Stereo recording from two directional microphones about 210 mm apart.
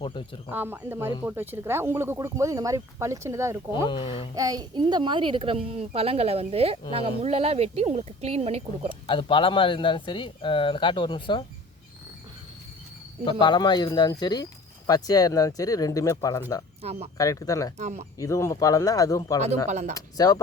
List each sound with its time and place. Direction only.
0.0 s speech: 20° left (ahead or behind)
0.5 s speech: 10° right (ahead or behind)
3.8 s speech: 25° left (ahead or behind)
4.4 s speech: 15° right (ahead or behind)
9.0 s speech: 25° left (ahead or behind)
13.4 s speech: 20° left (ahead or behind)
16.8 s speech: 30° right (ahead or behind)
17.2 s speech: 15° left (ahead or behind)
17.7 s speech: 35° right (ahead or behind)
18.2 s speech: 15° left (ahead or behind)
19.6 s speech: 35° right (ahead or behind)
19.9 s speech: 15° left (ahead or behind)